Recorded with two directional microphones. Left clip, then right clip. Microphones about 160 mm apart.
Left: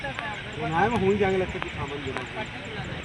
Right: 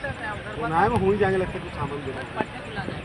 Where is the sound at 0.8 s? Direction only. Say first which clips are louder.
Right 2 dB; 40° left (ahead or behind).